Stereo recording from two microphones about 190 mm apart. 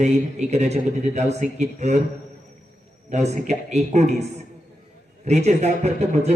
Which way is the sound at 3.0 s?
35° right (ahead or behind).